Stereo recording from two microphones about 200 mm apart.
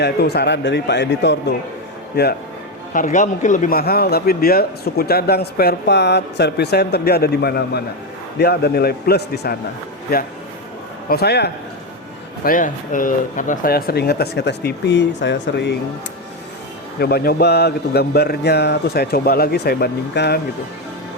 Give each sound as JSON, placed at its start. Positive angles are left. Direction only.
{"t": 0.0, "sound": "speech", "side_deg": 55}
{"t": 2.9, "sound": "a man's voice", "side_deg": 40}
{"t": 11.1, "sound": "a man's voice", "side_deg": 55}
{"t": 12.5, "sound": "a man's voice", "side_deg": 40}
{"t": 17.0, "sound": "a man's voice", "side_deg": 50}